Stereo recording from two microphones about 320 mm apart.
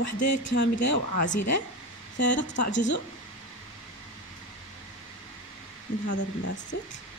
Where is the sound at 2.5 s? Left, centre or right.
Left.